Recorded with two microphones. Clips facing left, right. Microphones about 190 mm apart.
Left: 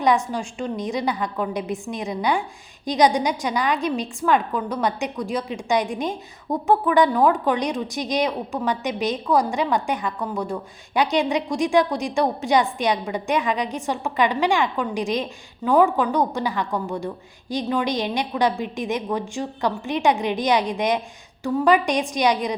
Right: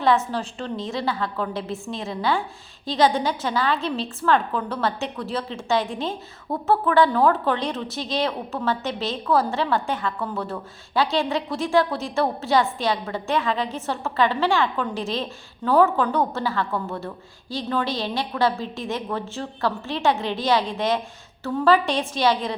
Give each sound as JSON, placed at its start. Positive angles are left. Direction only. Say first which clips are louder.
{"t": 0.3, "sound": "a woman's voice", "louder": "left 1 dB", "side_deg": 15}